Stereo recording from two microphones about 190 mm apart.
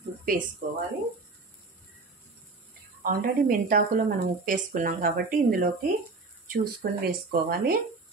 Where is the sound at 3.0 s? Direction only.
50° right (ahead or behind).